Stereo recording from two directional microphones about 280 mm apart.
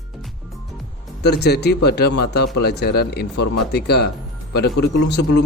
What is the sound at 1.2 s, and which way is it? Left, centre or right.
A man's voice, left.